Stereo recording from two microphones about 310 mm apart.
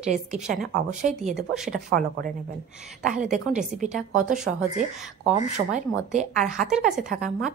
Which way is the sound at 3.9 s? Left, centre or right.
Centre.